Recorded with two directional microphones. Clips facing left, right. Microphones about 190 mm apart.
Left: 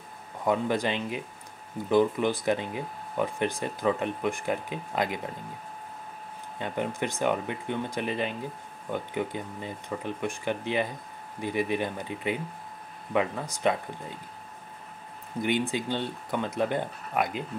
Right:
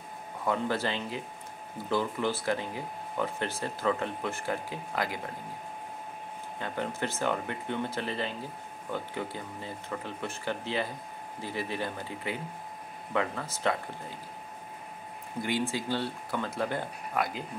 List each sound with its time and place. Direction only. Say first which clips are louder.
0.5 s speech: left 4 dB; 15° left (ahead or behind)
6.6 s speech: left 3 dB; 20° left (ahead or behind)
15.4 s speech: left 3 dB; 20° left (ahead or behind)